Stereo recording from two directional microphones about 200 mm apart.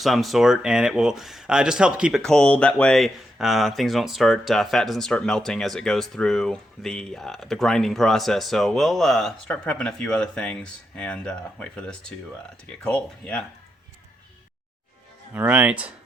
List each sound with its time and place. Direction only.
0.0 s speech: centre (ahead or behind)
15.3 s speech: 10° right (ahead or behind)